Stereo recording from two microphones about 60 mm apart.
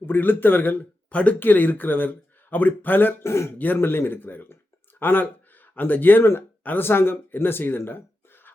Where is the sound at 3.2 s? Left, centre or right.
Left.